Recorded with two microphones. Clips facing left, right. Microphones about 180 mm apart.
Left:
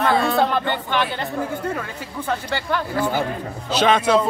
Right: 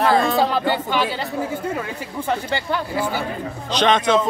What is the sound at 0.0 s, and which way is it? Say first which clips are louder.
Speech: right 1 dB; centre (ahead or behind).